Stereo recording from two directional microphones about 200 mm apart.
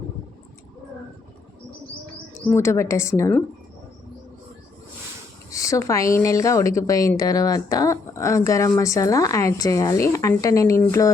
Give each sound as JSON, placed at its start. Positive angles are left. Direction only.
{"t": 2.4, "sound": "a woman's voice", "side_deg": 10}
{"t": 5.5, "sound": "a woman's voice", "side_deg": 15}